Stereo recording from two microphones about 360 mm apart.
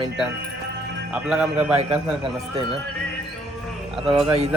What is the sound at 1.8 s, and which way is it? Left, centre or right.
Speech, centre.